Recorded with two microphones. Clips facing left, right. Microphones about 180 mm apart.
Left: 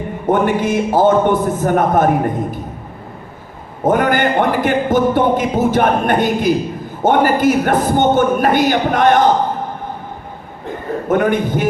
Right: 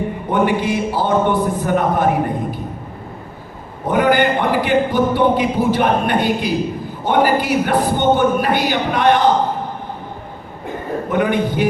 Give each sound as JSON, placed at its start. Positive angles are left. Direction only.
{"t": 0.3, "sound": "speech", "side_deg": 45}
{"t": 3.8, "sound": "speech", "side_deg": 45}
{"t": 11.1, "sound": "speech", "side_deg": 45}